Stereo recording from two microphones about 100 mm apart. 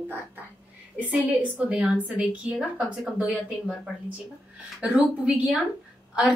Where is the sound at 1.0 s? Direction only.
15° right (ahead or behind).